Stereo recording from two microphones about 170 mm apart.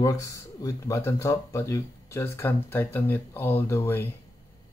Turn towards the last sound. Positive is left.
turn(degrees=15)  # may be behind; listen again after turning